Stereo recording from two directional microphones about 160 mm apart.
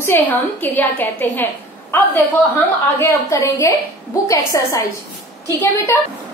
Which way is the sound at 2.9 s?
15° left (ahead or behind).